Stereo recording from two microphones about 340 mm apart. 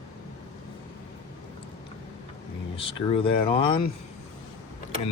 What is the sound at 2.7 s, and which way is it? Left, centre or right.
Speech, centre.